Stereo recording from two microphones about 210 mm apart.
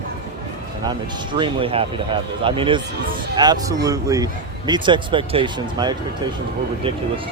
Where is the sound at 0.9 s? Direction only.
20° right (ahead or behind).